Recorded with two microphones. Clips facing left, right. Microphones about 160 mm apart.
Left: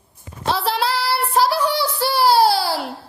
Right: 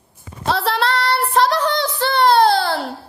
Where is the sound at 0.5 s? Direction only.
Centre (ahead or behind).